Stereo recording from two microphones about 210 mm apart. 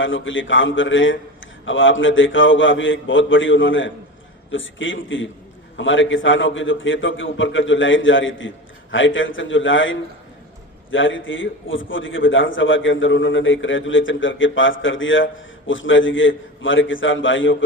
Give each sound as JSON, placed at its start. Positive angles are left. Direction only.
{"t": 0.0, "sound": "a man's voice", "side_deg": 65}